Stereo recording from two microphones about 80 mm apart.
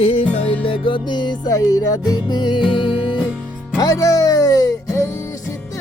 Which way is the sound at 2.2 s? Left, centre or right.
Left.